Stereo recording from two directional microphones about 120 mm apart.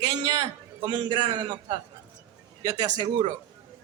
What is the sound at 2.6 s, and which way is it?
Speech, 35° right (ahead or behind).